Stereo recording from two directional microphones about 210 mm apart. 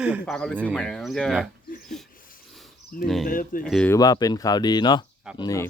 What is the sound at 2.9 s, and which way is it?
Speech, 45° left (ahead or behind).